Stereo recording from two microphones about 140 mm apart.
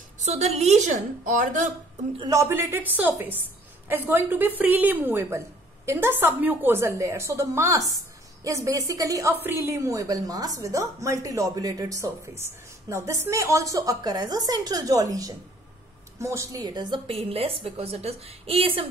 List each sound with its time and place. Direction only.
0.2 s a woman's voice: 55° right (ahead or behind)
2.3 s a woman's voice: 15° right (ahead or behind); by 18.9 s 40° right (ahead or behind)